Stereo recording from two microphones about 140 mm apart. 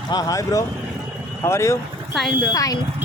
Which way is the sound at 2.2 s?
Centre (ahead or behind).